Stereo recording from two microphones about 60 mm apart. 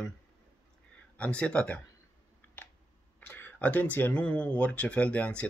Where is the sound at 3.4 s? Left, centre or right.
Left.